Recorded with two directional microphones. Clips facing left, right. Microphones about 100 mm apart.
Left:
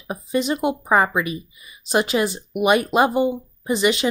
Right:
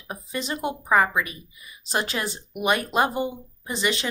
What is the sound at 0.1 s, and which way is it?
Speech, 15° left (ahead or behind).